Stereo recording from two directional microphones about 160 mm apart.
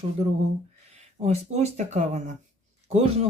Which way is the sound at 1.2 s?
45° right (ahead or behind).